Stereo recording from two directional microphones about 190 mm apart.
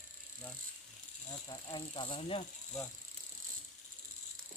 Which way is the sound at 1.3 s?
20° left (ahead or behind).